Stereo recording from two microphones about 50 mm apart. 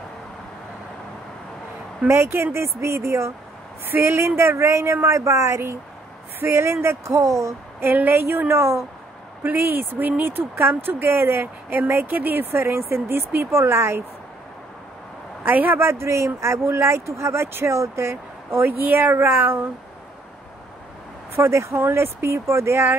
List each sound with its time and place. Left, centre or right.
2.0 s speech: right
5.0 s speech: right
7.8 s speech: right
8.5 s speech: right
9.4 s speech: right
11.7 s speech: right
15.4 s a man's voice: right
15.8 s speech: right
16.3 s speech: right
18.7 s speech: right
21.4 s speech: right
21.7 s speech: right